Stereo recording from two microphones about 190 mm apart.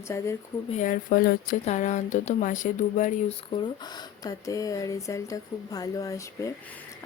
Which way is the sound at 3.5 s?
25° left (ahead or behind).